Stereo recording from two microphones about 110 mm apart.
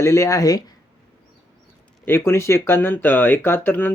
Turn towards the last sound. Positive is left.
turn(degrees=15)  # may be behind; listen again after turning